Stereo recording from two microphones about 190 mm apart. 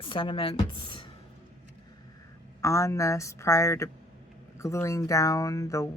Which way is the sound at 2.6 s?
15° left (ahead or behind).